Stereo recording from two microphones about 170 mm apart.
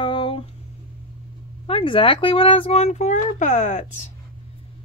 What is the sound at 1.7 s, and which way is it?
A child's voice, 30° left (ahead or behind).